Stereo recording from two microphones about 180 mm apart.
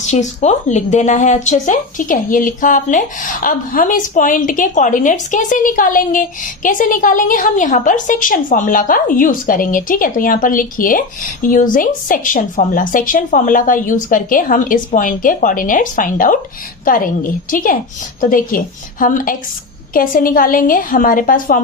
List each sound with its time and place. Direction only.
0.0 s a woman's voice: 40° left (ahead or behind)